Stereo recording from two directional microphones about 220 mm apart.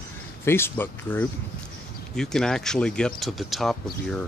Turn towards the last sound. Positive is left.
turn(degrees=0)  # may be behind; listen again after turning